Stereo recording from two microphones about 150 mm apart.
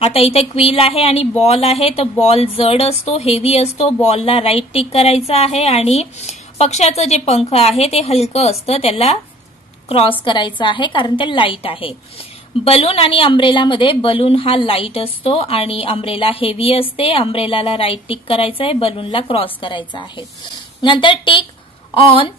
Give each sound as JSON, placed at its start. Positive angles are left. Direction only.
{"t": 0.0, "sound": "a woman's voice", "side_deg": 40}